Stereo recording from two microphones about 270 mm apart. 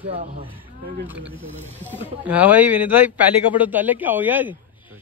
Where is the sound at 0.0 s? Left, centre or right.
Right.